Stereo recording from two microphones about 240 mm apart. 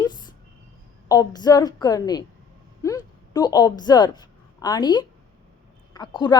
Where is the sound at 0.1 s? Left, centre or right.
Centre.